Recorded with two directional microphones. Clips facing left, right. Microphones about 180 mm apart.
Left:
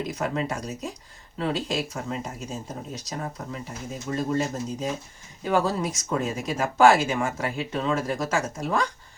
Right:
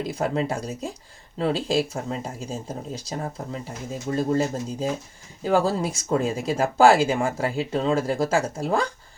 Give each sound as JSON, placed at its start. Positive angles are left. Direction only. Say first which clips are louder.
{"t": 0.1, "sound": "speech", "louder": "right 3 dB", "side_deg": -30}